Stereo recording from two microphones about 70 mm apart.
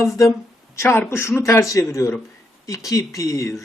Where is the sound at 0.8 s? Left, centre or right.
Left.